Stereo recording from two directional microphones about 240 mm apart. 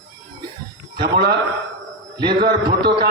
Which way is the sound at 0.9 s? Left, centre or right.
Right.